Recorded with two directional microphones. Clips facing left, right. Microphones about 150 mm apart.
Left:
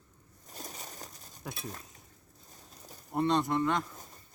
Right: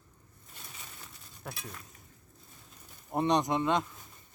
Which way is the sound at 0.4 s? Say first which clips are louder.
Left 6 dB; 40° left (ahead or behind).